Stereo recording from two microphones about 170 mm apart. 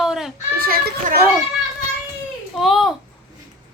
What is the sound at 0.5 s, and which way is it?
Speech, 60° right (ahead or behind).